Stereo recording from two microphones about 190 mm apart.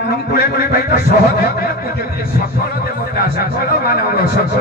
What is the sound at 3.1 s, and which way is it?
A man's voice, 50° left (ahead or behind).